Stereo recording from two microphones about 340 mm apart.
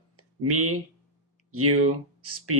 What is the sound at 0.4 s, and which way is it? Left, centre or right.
Speech, right.